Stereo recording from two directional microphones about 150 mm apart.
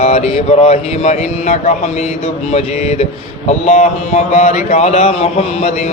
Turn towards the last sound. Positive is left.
turn(degrees=50)  # may be behind; listen again after turning